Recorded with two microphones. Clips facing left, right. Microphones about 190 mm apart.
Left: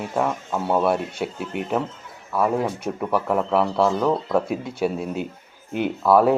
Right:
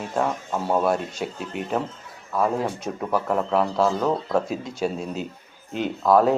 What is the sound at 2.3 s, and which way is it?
Speech, 5° left (ahead or behind).